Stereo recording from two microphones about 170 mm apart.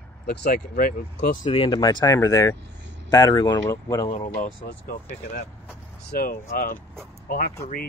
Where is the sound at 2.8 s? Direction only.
90° right.